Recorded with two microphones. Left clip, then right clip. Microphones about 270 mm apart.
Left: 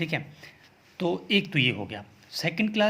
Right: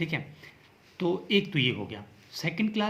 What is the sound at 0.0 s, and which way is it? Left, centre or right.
Speech, left.